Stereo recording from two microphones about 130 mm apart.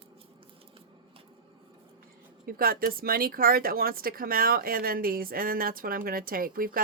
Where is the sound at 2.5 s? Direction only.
90° right.